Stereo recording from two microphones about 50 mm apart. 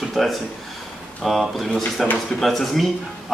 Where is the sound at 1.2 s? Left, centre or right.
Centre.